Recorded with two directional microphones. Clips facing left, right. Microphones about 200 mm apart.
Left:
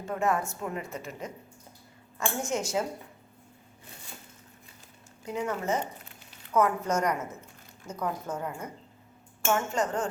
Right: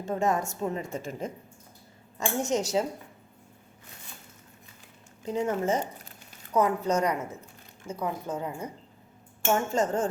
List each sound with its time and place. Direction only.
0.1 s a woman's voice: 25° right (ahead or behind)
2.5 s a woman's voice: 40° right (ahead or behind)
5.2 s speech: 25° right (ahead or behind)
6.5 s a woman's voice: 15° right (ahead or behind)
9.5 s speech: 25° right (ahead or behind)